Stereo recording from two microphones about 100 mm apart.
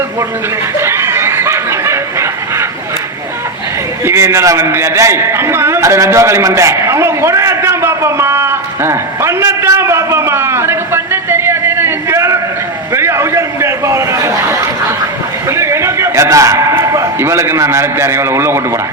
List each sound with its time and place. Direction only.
0.8 s snicker: 25° right (ahead or behind)
4.0 s a man's voice: 25° right (ahead or behind)
12.9 s a sound: 25° right (ahead or behind)
15.4 s a man's voice: 25° right (ahead or behind)